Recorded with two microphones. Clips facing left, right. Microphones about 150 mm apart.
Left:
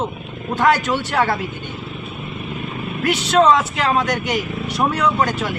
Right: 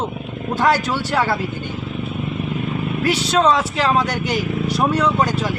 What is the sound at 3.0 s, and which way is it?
Speech, 35° right (ahead or behind).